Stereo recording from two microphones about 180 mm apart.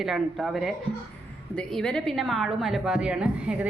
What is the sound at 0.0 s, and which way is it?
A woman's voice, centre (ahead or behind).